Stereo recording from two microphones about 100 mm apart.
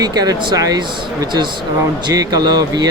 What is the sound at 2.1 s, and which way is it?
Speech, 40° right (ahead or behind).